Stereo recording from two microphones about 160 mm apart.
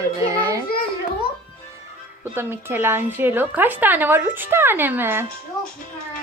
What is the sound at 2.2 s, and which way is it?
A woman's voice, 15° right (ahead or behind).